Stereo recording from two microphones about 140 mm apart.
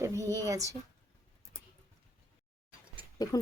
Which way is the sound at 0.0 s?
20° right (ahead or behind).